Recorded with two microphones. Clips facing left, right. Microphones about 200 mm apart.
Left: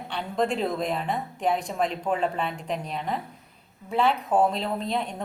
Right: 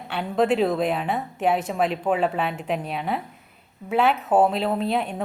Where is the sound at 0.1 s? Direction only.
5° right (ahead or behind).